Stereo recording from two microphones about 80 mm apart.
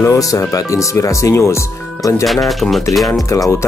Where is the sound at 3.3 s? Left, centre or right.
Left.